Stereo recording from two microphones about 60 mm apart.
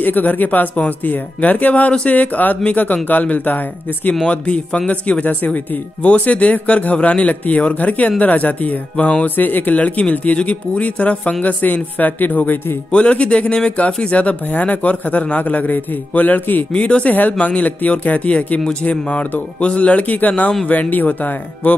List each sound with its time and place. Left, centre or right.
0.0 s speech: left
12.9 s speech: centre
16.7 s speech: centre